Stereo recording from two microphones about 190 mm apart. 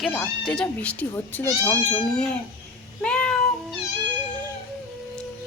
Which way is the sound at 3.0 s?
5° left (ahead or behind).